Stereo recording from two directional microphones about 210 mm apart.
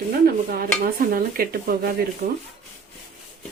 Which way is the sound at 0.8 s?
45° right (ahead or behind).